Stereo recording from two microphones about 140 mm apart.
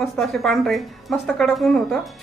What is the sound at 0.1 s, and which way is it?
A woman's voice, centre (ahead or behind).